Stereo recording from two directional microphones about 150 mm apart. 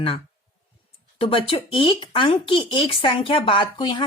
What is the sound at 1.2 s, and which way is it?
Speech, 35° left (ahead or behind).